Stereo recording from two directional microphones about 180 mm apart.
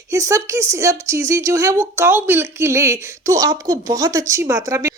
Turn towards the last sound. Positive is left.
turn(degrees=-20)  # may be behind; listen again after turning